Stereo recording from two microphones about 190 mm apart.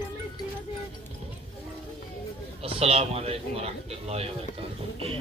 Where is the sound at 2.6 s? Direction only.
30° right (ahead or behind).